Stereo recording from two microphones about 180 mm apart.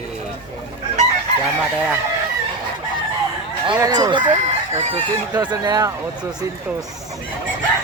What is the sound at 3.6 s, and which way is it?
Chicken, 25° right (ahead or behind).